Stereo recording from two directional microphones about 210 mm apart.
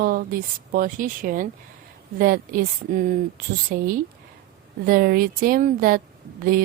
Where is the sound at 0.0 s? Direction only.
45° right (ahead or behind).